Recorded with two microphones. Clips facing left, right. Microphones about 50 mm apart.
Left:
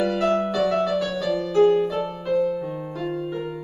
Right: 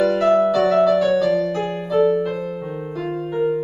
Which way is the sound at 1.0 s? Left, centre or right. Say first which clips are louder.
Right 7 dB; centre.